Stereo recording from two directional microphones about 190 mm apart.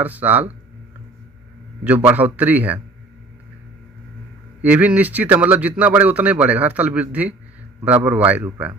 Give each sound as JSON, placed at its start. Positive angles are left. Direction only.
{"t": 0.0, "sound": "speech", "side_deg": -10}
{"t": 1.8, "sound": "speech", "side_deg": -10}
{"t": 4.6, "sound": "speech", "side_deg": -10}